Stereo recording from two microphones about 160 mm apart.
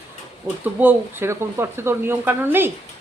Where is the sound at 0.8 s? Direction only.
15° right (ahead or behind).